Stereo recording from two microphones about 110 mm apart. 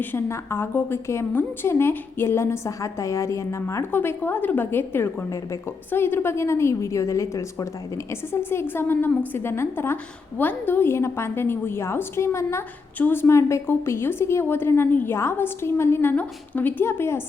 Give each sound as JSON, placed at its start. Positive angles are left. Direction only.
{"t": 0.0, "sound": "a woman's voice", "side_deg": 20}